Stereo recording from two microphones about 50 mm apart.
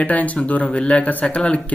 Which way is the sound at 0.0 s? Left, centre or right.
Left.